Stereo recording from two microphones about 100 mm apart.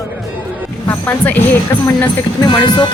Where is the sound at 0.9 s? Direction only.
20° left (ahead or behind).